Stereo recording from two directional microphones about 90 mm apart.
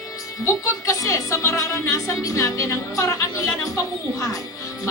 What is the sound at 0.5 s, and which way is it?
A woman's voice, 35° left (ahead or behind).